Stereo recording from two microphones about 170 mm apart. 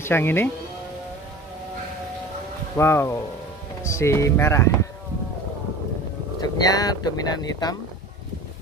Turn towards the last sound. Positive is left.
turn(degrees=25)  # may be behind; listen again after turning